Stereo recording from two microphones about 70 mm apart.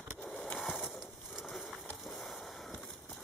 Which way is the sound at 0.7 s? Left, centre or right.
Centre.